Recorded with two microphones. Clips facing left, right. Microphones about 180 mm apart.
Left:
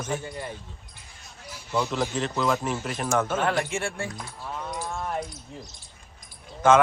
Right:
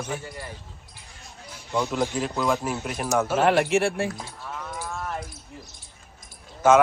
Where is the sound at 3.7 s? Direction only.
65° right (ahead or behind).